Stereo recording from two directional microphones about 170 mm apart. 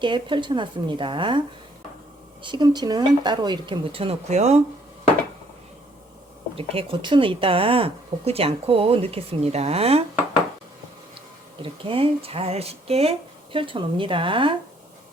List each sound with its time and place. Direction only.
0.0 s speech: 30° right (ahead or behind)
2.4 s speech: 25° right (ahead or behind)
6.6 s speech: 35° right (ahead or behind)
11.6 s speech: 30° right (ahead or behind)